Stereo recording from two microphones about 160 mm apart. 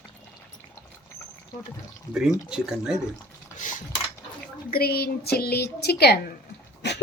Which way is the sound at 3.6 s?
55° left (ahead or behind).